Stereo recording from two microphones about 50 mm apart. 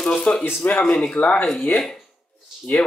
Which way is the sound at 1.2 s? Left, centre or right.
Left.